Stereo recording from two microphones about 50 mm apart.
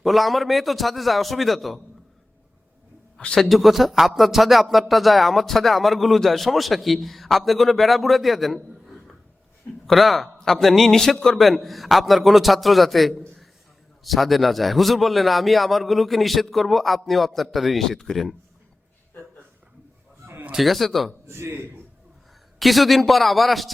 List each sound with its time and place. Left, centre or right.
0.0 s speech: centre
3.4 s speech: centre
20.6 s speech: centre
21.2 s a man's voice: right
22.5 s speech: centre